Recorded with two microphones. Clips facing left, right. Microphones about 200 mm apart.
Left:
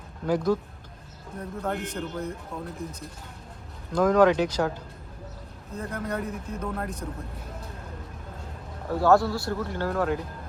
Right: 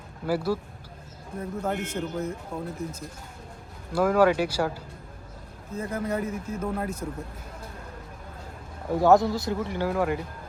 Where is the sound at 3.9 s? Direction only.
10° right (ahead or behind).